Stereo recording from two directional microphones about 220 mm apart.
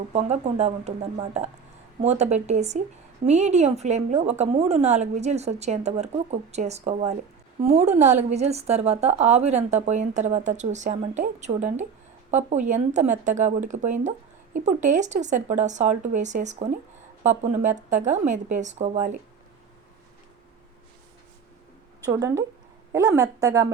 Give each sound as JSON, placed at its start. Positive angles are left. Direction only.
{"t": 0.1, "sound": "speech", "side_deg": -30}
{"t": 22.0, "sound": "a woman's voice", "side_deg": -15}